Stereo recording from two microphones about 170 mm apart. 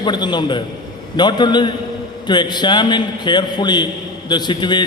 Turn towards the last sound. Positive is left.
turn(degrees=25)  # may be behind; listen again after turning